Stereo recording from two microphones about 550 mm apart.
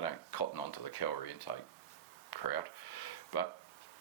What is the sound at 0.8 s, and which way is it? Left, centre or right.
Speech, left.